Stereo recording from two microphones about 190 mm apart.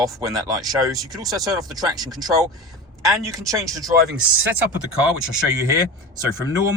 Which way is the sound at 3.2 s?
15° right (ahead or behind).